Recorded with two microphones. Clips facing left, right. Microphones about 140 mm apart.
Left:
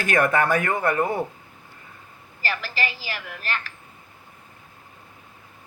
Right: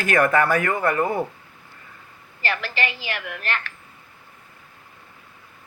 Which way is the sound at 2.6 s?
35° left (ahead or behind).